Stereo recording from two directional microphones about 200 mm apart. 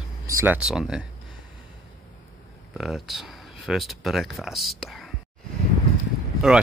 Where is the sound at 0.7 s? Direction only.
5° right (ahead or behind).